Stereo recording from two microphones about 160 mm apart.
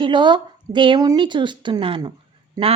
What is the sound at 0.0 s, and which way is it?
Speech, 30° right (ahead or behind).